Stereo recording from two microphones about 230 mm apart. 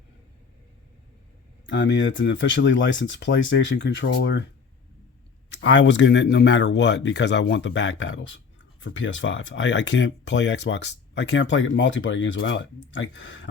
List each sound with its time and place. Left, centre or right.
1.6 s speech: left
5.5 s speech: left